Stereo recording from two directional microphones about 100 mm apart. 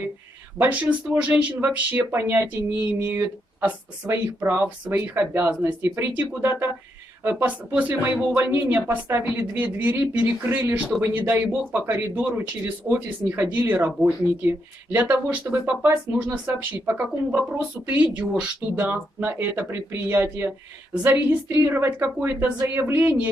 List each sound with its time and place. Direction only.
0.6 s speech: 15° right (ahead or behind)
3.6 s speech: 25° right (ahead or behind)